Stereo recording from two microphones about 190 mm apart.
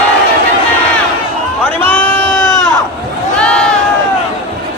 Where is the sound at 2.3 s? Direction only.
15° left (ahead or behind).